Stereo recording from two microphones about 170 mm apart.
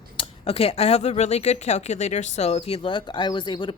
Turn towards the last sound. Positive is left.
turn(degrees=30)  # may be behind; listen again after turning